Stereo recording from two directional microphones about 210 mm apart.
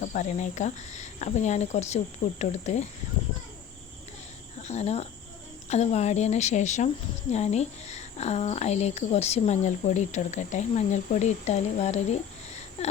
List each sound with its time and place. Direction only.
0.0 s a woman's voice: 35° left (ahead or behind)
4.6 s a woman's voice: 30° left (ahead or behind)